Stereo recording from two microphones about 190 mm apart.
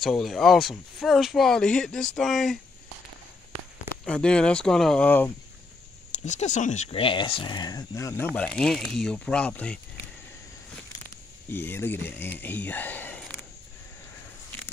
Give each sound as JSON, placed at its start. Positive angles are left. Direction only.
{"t": 0.0, "sound": "speech", "side_deg": 0}
{"t": 4.0, "sound": "speech", "side_deg": 5}
{"t": 6.1, "sound": "speech", "side_deg": 40}
{"t": 8.4, "sound": "speech", "side_deg": 5}
{"t": 11.5, "sound": "speech", "side_deg": 10}